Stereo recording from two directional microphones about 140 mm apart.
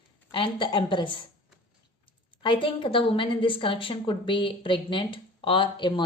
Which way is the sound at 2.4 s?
35° left (ahead or behind).